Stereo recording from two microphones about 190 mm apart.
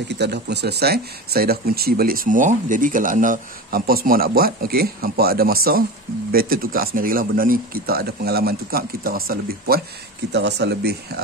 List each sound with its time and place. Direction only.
0.1 s speech: 65° right (ahead or behind)
10.3 s speech: 65° right (ahead or behind)